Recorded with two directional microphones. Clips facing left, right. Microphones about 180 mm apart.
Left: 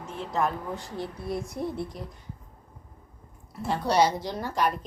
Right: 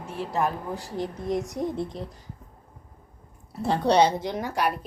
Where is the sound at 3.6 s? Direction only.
30° right (ahead or behind); by 4.7 s 10° right (ahead or behind).